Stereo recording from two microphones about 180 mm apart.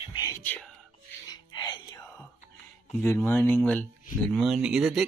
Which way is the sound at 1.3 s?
20° left (ahead or behind).